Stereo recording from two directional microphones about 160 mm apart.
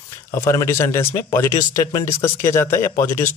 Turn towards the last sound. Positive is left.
turn(degrees=15)  # may be behind; listen again after turning